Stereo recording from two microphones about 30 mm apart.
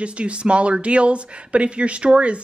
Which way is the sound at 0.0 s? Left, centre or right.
Right.